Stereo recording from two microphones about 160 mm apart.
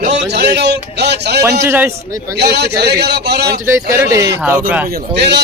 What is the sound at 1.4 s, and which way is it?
Speech, 15° right (ahead or behind).